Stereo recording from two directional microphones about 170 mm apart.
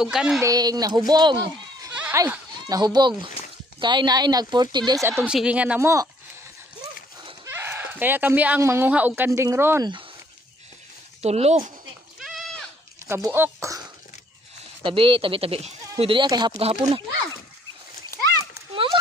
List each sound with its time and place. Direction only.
0.0 s a woman's voice: 5° right (ahead or behind)
0.4 s speech: 20° right (ahead or behind)
2.0 s goat: 10° right (ahead or behind)
2.8 s speech: 25° right (ahead or behind)
7.4 s speech: 15° right (ahead or behind)
11.2 s speech: 40° right (ahead or behind)
12.2 s goat: centre (ahead or behind)
13.0 s speech: 15° right (ahead or behind)
14.8 s speech: 30° right (ahead or behind)